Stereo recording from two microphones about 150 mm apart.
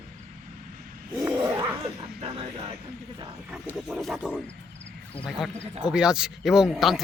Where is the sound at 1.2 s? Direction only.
20° right (ahead or behind).